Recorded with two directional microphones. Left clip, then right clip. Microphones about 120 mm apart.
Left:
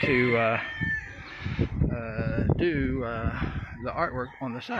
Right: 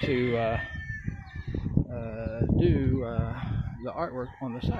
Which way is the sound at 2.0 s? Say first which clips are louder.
Left 2 dB; 5° right (ahead or behind).